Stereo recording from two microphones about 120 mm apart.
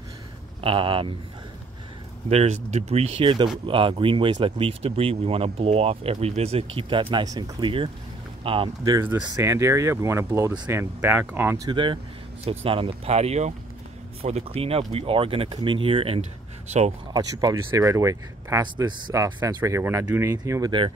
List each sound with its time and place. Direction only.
0.6 s speech: 45° right (ahead or behind)
2.2 s speech: 65° right (ahead or behind); by 8.6 s 50° right (ahead or behind)
9.3 s speech: 25° right (ahead or behind)
11.6 s speech: 45° right (ahead or behind); by 16.9 s 70° right (ahead or behind)
17.1 s speech: 30° right (ahead or behind)
18.6 s speech: 40° right (ahead or behind)